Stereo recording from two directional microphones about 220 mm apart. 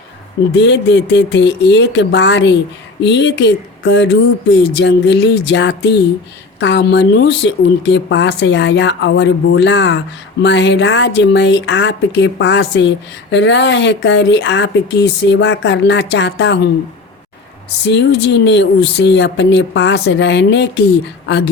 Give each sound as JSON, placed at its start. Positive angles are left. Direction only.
{"t": 0.5, "sound": "speech", "side_deg": 50}
{"t": 17.8, "sound": "speech", "side_deg": 50}